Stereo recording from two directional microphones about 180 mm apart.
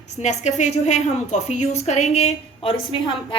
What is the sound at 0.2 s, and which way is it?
A woman's voice, 40° left (ahead or behind).